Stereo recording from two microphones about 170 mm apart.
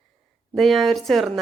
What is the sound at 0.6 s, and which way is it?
Speech, centre (ahead or behind).